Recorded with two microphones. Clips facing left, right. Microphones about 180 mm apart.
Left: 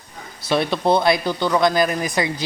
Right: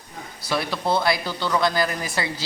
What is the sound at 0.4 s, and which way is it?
Speech, 25° left (ahead or behind).